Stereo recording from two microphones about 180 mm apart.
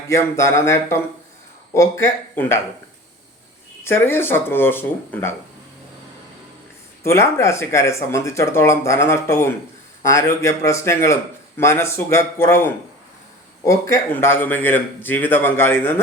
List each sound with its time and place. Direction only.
0.1 s a man's voice: 15° left (ahead or behind)
3.8 s a man's voice: 15° left (ahead or behind)
7.0 s a man's voice: 15° left (ahead or behind)